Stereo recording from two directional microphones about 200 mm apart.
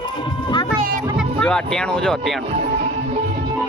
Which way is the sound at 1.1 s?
5° left (ahead or behind).